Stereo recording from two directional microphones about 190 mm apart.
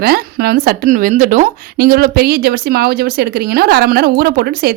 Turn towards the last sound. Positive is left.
turn(degrees=-55)  # may be behind; listen again after turning